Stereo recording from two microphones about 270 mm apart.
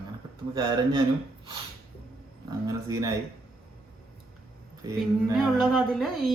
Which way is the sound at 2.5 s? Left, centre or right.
Centre.